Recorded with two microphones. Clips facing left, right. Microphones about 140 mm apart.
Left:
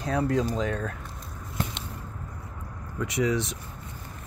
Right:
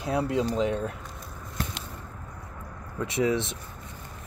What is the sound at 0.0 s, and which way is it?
Speech, 10° right (ahead or behind).